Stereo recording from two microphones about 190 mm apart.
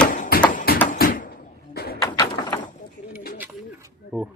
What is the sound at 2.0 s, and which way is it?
Bird, 20° left (ahead or behind).